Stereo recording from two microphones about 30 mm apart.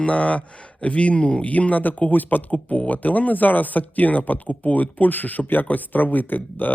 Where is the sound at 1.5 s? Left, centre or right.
Left.